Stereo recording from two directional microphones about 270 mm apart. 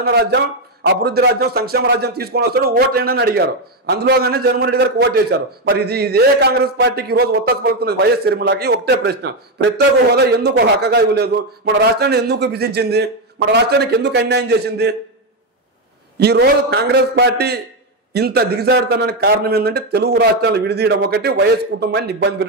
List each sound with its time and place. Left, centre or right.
0.0 s a man's voice: right
16.2 s a man's voice: right